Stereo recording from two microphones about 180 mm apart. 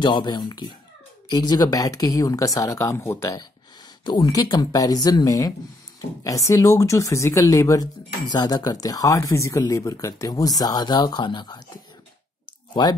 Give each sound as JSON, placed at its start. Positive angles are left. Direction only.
{"t": 0.0, "sound": "speech", "side_deg": 25}